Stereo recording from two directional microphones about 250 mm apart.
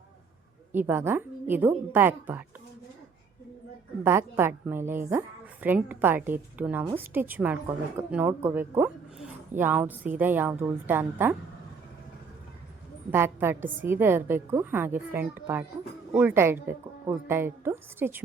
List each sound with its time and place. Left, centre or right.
0.7 s a woman's voice: centre
4.0 s a woman's voice: centre
13.1 s a woman's voice: centre